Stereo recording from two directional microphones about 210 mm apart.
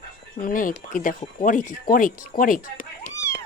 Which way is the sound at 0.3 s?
40° left (ahead or behind).